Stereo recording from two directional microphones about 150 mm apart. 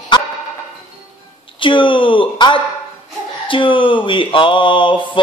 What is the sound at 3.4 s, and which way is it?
Music, 35° left (ahead or behind).